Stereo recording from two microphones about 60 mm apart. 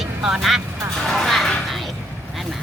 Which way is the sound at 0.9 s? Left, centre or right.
Centre.